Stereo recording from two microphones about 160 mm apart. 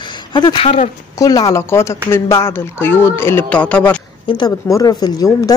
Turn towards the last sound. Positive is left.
turn(degrees=25)  # may be behind; listen again after turning